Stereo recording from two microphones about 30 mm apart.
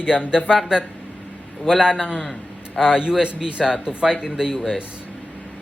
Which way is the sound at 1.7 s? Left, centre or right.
Right.